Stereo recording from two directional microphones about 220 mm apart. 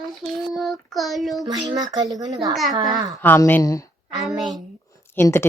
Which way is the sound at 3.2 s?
10° left (ahead or behind).